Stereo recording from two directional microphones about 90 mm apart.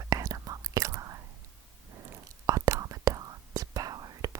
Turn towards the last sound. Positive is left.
turn(degrees=-45)  # may be behind; listen again after turning